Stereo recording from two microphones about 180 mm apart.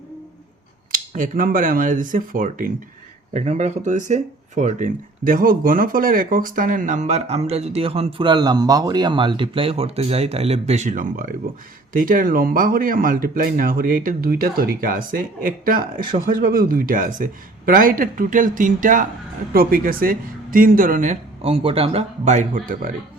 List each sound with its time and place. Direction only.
0.9 s speech: 50° right (ahead or behind)
3.3 s speech: 40° right (ahead or behind)